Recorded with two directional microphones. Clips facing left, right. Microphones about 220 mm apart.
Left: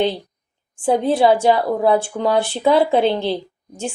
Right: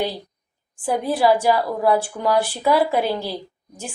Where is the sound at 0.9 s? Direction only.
25° left (ahead or behind).